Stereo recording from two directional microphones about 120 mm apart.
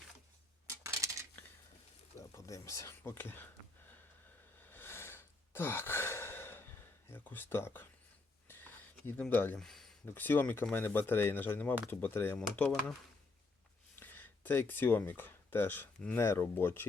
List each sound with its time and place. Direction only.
0.7 s a sound: 25° right (ahead or behind)
2.1 s a sound: 25° left (ahead or behind)
4.6 s sigh: 15° left (ahead or behind)
7.1 s speech: 15° left (ahead or behind)
8.4 s a sound: 15° left (ahead or behind)
9.3 s speech: 15° left (ahead or behind)
9.6 s speech: centre (ahead or behind)
10.1 s speech: 15° left (ahead or behind)
14.0 s speech: 15° left (ahead or behind)